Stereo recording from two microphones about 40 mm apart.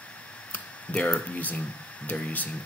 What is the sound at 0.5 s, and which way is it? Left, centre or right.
Speech, left.